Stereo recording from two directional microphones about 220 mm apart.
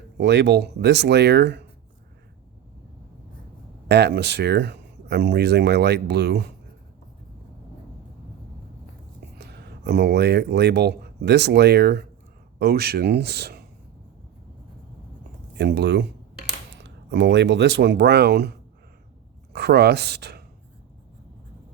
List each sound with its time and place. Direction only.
0.2 s speech: 50° right (ahead or behind)
3.8 s speech: 50° right (ahead or behind)
9.4 s speech: 50° right (ahead or behind)
15.5 s speech: 50° right (ahead or behind)
17.1 s speech: 50° right (ahead or behind)
19.5 s speech: 50° right (ahead or behind)